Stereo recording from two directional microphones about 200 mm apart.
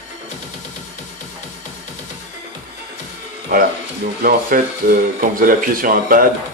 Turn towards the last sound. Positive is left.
turn(degrees=-45)  # may be behind; listen again after turning